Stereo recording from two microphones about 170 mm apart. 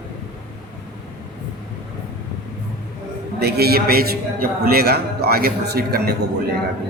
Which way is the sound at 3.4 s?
70° right (ahead or behind).